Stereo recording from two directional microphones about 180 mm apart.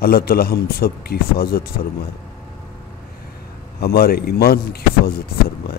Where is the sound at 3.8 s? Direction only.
60° left (ahead or behind).